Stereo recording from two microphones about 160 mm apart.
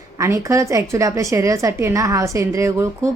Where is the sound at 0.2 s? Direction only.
20° right (ahead or behind).